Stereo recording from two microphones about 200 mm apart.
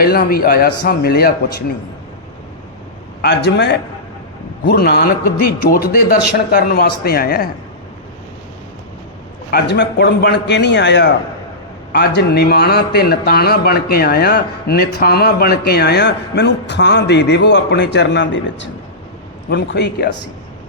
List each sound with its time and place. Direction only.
0.0 s a man's voice: 50° left (ahead or behind)
3.2 s a man's voice: 55° left (ahead or behind)
9.5 s a man's voice: 55° left (ahead or behind)